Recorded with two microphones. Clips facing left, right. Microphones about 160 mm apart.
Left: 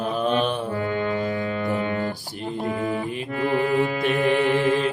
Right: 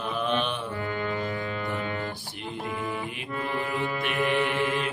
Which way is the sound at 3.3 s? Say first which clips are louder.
Left 8 dB; 75° left (ahead or behind).